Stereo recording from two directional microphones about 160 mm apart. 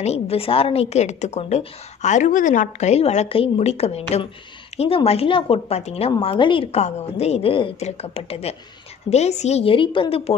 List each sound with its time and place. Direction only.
0.0 s a woman's voice: 40° left (ahead or behind)